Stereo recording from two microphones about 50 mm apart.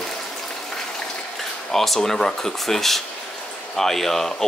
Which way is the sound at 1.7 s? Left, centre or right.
Centre.